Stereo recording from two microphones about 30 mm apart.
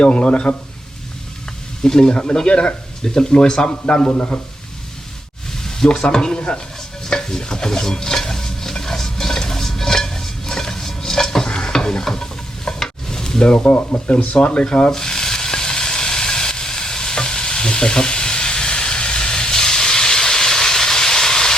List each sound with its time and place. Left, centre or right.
0.0 s speech: left
1.8 s speech: left
5.5 s sizzle: centre
5.9 s speech: left
7.1 s stir: left
13.4 s speech: left
14.8 s frying: centre